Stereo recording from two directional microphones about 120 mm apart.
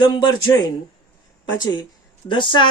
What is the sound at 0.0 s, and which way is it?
Speech, 40° left (ahead or behind).